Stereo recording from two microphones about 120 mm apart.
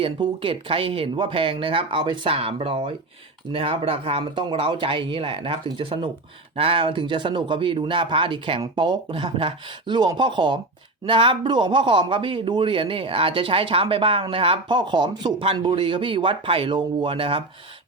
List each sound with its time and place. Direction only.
0.0 s a man's voice: 45° right (ahead or behind)